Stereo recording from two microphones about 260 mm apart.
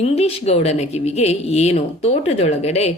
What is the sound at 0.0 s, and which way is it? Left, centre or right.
A woman's voice, left.